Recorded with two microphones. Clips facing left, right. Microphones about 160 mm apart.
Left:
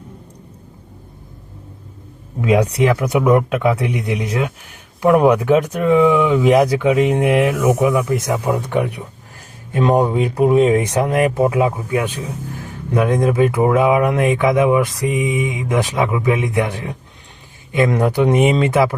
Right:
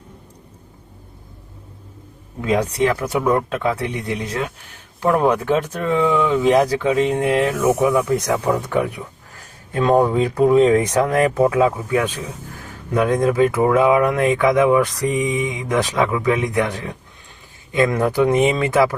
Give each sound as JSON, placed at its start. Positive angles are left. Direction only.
{"t": 2.4, "sound": "speech", "side_deg": 10}